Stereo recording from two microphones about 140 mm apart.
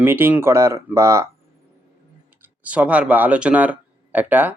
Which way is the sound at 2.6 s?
10° right (ahead or behind).